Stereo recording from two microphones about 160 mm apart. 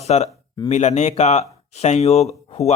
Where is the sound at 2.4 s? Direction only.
40° left (ahead or behind).